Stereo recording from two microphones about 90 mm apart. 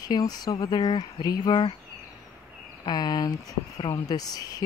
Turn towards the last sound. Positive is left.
turn(degrees=45)  # may be behind; listen again after turning